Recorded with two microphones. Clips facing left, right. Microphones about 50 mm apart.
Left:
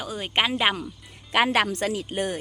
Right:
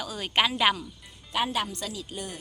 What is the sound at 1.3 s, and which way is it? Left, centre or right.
Speech, left.